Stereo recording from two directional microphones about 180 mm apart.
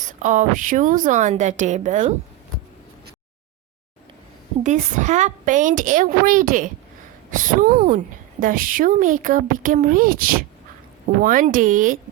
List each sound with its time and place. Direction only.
0.2 s a woman's voice: 45° right (ahead or behind)
4.6 s a woman's voice: 40° right (ahead or behind)